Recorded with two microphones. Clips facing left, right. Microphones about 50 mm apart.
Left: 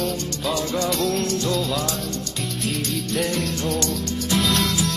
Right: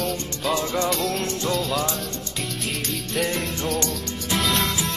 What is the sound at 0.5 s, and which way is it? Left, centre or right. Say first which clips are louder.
Music: even; right.